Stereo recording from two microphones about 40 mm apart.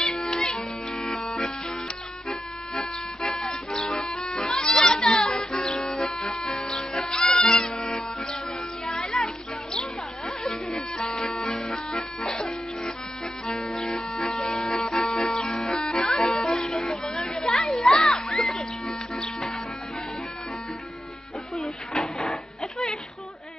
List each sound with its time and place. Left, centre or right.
0.0 s music: centre
4.6 s children playing: left
4.9 s music: centre
14.1 s music: centre
21.5 s a sound: centre